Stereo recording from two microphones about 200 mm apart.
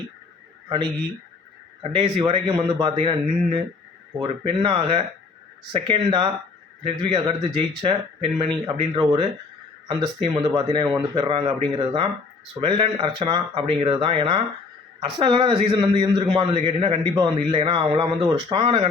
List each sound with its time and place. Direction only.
2.0 s speech: 25° right (ahead or behind)